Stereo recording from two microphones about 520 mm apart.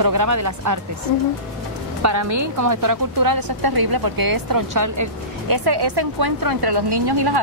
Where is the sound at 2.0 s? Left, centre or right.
Right.